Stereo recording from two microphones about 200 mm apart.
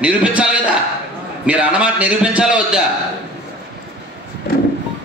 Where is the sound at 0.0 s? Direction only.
5° right (ahead or behind).